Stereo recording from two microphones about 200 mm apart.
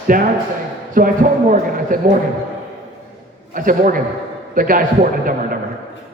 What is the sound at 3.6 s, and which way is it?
A man's voice, 45° right (ahead or behind).